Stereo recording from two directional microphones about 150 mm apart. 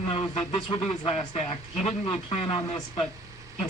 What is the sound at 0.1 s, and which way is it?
Speech, 40° left (ahead or behind).